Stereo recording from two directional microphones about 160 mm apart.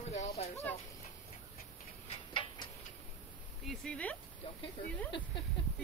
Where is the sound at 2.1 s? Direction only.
35° left (ahead or behind).